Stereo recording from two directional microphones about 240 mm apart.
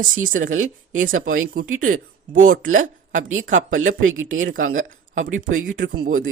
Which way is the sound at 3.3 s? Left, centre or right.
Right.